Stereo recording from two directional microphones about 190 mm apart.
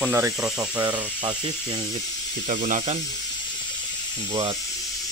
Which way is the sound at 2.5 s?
45° right (ahead or behind).